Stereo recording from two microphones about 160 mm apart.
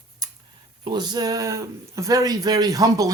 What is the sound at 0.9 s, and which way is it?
Speech, 25° right (ahead or behind).